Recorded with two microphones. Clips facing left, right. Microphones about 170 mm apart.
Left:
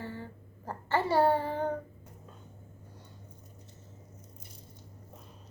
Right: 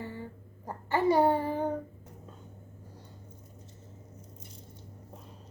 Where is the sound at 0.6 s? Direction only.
15° right (ahead or behind).